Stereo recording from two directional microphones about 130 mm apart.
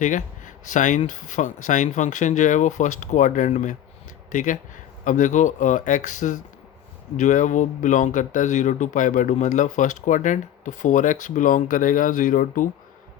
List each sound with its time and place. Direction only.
0.0 s speech: 80° left
4.3 s speech: 90° left